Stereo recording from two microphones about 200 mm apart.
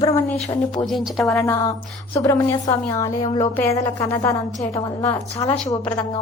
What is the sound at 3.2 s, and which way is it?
Music, 25° left (ahead or behind).